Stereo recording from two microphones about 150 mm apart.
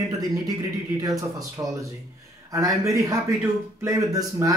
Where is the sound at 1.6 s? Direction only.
20° right (ahead or behind).